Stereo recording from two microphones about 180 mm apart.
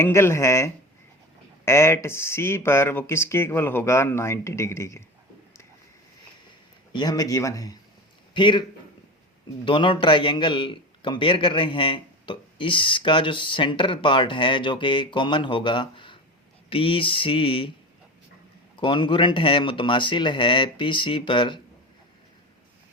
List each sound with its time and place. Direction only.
0.0 s speech: 15° left (ahead or behind)
6.9 s a man's voice: 20° left (ahead or behind)
9.6 s a man's voice: 30° left (ahead or behind)
18.8 s a man's voice: 25° left (ahead or behind)